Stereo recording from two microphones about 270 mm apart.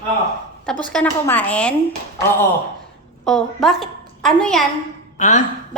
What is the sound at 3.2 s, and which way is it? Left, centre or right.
A woman's voice, centre.